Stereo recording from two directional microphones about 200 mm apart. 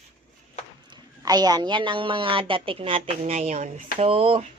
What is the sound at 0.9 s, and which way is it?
A woman's voice, 20° right (ahead or behind).